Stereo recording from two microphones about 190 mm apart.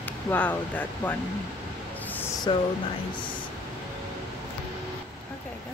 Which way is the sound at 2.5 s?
25° left (ahead or behind).